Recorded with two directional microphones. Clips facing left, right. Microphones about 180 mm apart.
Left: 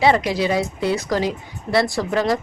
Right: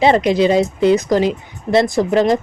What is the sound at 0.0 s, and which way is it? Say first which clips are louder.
A woman's voice: right 5 dB; 20° right (ahead or behind).